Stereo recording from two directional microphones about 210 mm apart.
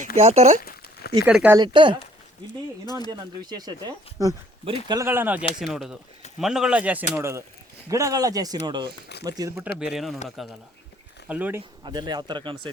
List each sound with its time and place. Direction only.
0.2 s speech: 30° right (ahead or behind)
0.6 s a sound: 45° left (ahead or behind)
1.1 s speech: 10° right (ahead or behind)
1.5 s speech: 20° right (ahead or behind)
3.1 s speech: 20° right (ahead or behind)
9.7 s speech: centre (ahead or behind)
11.8 s speech: 20° right (ahead or behind)